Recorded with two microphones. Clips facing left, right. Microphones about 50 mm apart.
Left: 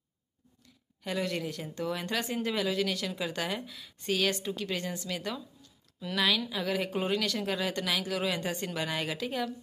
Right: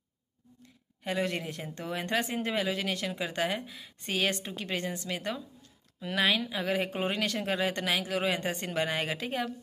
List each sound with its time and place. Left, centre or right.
0.6 s speech: right